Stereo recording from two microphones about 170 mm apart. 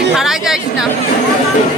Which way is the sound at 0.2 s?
Centre (ahead or behind).